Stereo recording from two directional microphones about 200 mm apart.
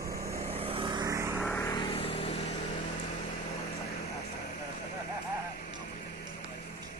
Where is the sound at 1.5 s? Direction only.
15° left (ahead or behind); by 2.8 s 30° left (ahead or behind).